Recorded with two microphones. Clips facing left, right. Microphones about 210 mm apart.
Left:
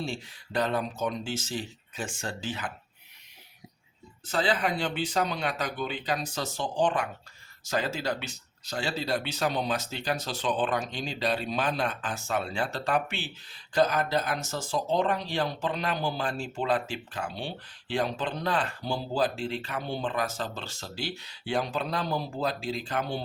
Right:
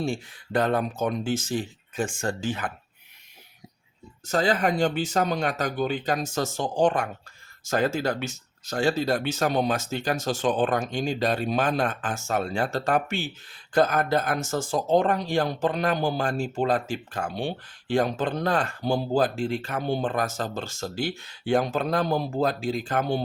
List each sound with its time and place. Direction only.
0.0 s speech: 50° right (ahead or behind)
4.3 s speech: 45° right (ahead or behind)